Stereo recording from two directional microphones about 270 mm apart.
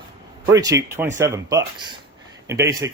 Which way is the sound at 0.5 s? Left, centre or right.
Centre.